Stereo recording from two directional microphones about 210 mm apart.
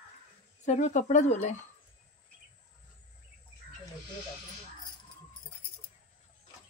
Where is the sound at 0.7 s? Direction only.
35° left (ahead or behind).